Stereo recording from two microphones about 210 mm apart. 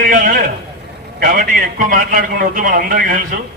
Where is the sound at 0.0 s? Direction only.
40° right (ahead or behind).